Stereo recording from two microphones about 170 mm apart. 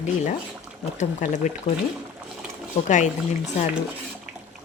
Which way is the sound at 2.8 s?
45° left (ahead or behind).